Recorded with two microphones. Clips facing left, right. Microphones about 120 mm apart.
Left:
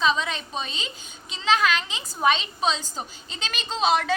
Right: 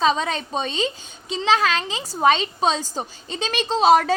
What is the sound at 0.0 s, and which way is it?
A woman's voice, 40° right (ahead or behind).